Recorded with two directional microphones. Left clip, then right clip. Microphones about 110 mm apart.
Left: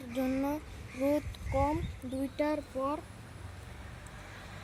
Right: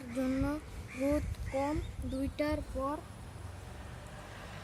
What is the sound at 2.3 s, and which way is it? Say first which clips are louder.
Music: left 3 dB; 15° left (ahead or behind).